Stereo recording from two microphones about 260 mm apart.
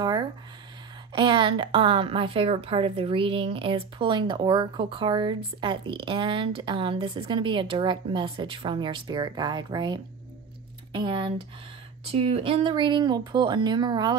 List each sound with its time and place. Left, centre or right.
1.1 s a woman's voice: centre